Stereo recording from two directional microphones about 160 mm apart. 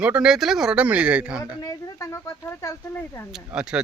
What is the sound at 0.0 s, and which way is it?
Speech, 5° right (ahead or behind).